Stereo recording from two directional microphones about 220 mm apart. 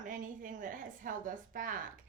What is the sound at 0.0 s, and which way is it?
A woman's voice, 35° right (ahead or behind).